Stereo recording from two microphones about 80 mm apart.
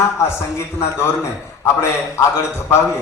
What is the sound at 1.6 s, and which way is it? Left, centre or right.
Speech, left.